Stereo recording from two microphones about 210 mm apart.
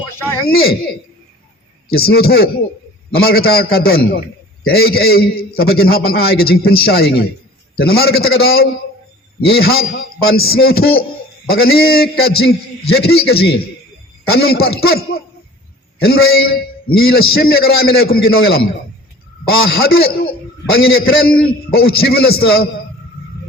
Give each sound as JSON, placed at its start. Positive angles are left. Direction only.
{"t": 0.4, "sound": "a man's voice", "side_deg": 45}
{"t": 1.9, "sound": "a man's voice", "side_deg": 45}
{"t": 16.0, "sound": "a man's voice", "side_deg": 45}
{"t": 20.9, "sound": "a man's voice", "side_deg": 75}
{"t": 21.2, "sound": "a man's voice", "side_deg": 45}